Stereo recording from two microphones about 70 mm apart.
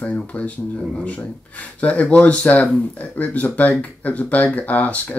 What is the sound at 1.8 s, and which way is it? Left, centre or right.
Speech, centre.